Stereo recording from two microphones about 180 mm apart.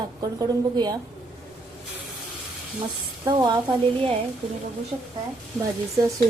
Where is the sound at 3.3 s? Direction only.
25° right (ahead or behind).